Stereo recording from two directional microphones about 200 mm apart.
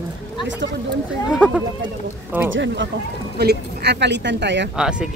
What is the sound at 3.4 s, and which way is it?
Speech, 55° right (ahead or behind).